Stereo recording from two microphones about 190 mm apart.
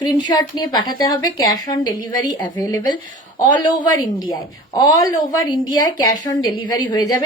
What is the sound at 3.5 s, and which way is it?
A woman's voice, 25° left (ahead or behind).